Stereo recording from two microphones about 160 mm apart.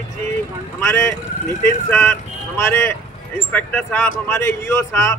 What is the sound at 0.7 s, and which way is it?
Speech, 15° left (ahead or behind).